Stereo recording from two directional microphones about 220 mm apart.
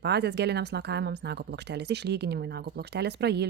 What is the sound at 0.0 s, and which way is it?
Speech, 50° right (ahead or behind).